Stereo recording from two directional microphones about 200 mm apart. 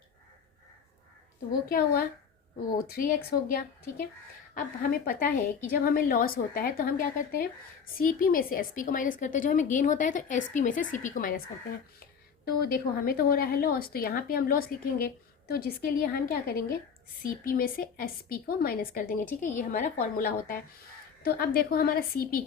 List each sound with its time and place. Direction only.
1.7 s a woman's voice: 50° left (ahead or behind)
12.5 s a woman's voice: 50° left (ahead or behind)